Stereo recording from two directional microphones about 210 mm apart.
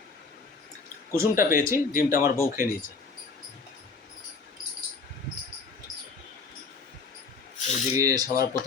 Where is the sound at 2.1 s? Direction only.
45° left (ahead or behind).